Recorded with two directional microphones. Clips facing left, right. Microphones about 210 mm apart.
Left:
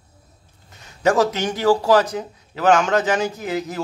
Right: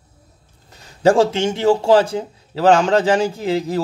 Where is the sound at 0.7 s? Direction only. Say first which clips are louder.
Right 4 dB; 30° right (ahead or behind).